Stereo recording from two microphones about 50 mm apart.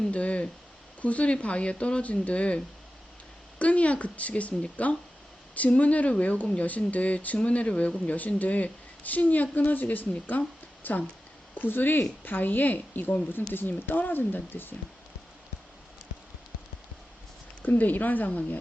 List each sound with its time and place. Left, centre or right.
0.1 s speech: left
3.6 s speech: left
17.6 s speech: left